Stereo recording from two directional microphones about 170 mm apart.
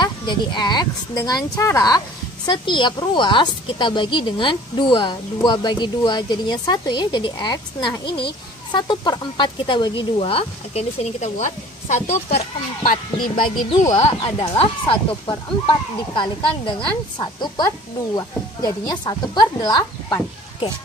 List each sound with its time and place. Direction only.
0.0 s a woman's voice: 25° left (ahead or behind)
8.1 s speech: 70° left (ahead or behind)
8.7 s speech: 25° left (ahead or behind)
12.8 s speech: 55° left (ahead or behind)
14.0 s a woman's voice: 35° left (ahead or behind); by 20.2 s 20° left (ahead or behind)